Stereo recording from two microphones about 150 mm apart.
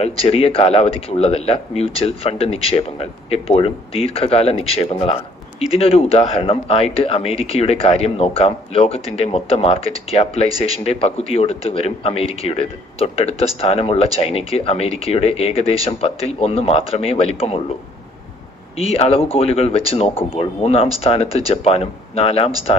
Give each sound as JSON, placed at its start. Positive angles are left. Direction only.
{"t": 0.0, "sound": "a man's voice", "side_deg": 40}
{"t": 18.8, "sound": "a man's voice", "side_deg": 40}